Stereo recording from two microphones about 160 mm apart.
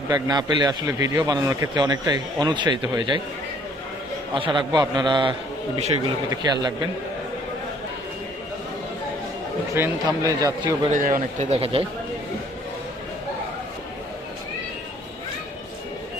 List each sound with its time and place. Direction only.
0.1 s a man's voice: 25° right (ahead or behind)
4.4 s a man's voice: 30° right (ahead or behind)
9.8 s a man's voice: 15° right (ahead or behind)
10.9 s speech: 55° right (ahead or behind); by 11.9 s 35° right (ahead or behind)